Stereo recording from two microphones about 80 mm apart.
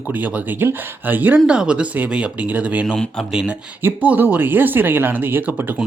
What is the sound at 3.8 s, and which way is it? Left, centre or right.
Speech, right.